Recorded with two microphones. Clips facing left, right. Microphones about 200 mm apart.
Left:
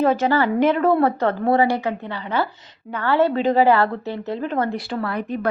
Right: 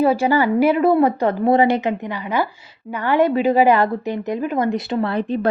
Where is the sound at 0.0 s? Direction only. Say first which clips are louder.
Right 2 dB; 10° right (ahead or behind).